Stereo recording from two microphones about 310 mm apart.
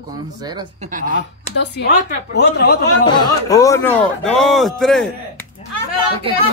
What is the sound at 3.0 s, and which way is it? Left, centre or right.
A man's voice, centre.